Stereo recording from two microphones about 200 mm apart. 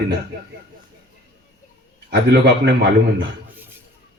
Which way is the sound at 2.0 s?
55° right (ahead or behind).